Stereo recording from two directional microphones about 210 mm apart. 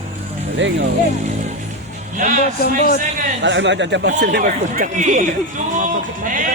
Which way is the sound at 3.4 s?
60° right (ahead or behind).